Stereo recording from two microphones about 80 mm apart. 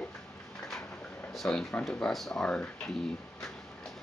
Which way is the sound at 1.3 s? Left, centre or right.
Centre.